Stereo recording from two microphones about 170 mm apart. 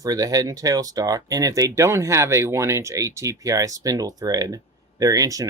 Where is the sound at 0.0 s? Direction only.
20° right (ahead or behind).